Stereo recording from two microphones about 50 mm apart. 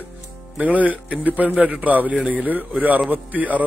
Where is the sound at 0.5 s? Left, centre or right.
Right.